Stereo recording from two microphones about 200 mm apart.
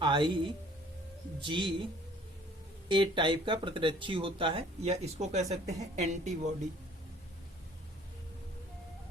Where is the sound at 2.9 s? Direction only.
25° right (ahead or behind).